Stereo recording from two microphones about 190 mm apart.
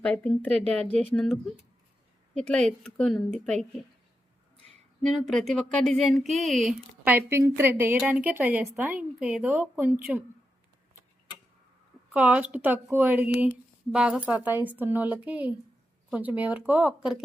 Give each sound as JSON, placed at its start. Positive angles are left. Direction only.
{"t": 0.0, "sound": "a woman's voice", "side_deg": 5}
{"t": 5.0, "sound": "speech", "side_deg": 0}
{"t": 7.0, "sound": "a woman's voice", "side_deg": -10}
{"t": 12.1, "sound": "a woman's voice", "side_deg": -5}